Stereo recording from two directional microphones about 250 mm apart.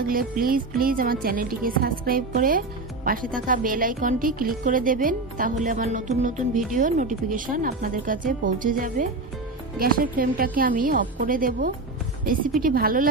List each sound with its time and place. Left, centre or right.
0.0 s speech: right